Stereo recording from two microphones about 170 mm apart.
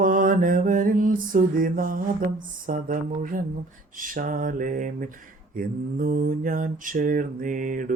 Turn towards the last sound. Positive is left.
turn(degrees=-50)  # may be behind; listen again after turning